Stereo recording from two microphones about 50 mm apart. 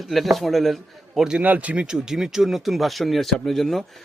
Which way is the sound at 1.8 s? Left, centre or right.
Centre.